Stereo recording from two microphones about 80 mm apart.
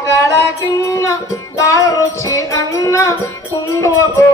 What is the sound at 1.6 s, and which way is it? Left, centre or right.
Music, left.